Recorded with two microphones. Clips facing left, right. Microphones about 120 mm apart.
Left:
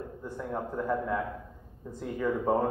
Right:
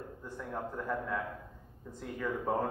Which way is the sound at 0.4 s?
20° left (ahead or behind).